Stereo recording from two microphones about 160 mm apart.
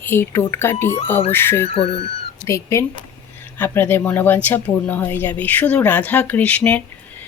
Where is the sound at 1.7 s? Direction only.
35° left (ahead or behind).